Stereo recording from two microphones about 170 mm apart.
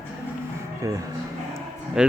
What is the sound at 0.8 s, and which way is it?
Speech, 20° right (ahead or behind).